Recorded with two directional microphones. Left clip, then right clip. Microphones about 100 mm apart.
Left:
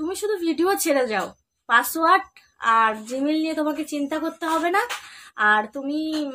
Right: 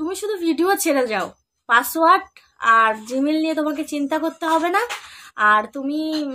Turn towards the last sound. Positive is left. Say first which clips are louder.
# right 2 dB
turn(degrees=-35)  # may be behind; listen again after turning